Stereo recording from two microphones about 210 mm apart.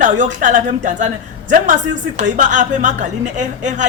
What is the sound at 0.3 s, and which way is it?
A woman's voice, 35° right (ahead or behind).